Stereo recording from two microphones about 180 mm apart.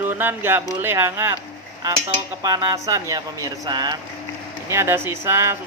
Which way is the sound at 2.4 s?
20° right (ahead or behind).